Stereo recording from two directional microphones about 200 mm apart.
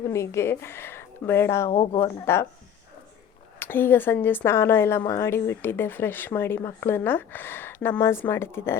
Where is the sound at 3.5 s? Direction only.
10° left (ahead or behind).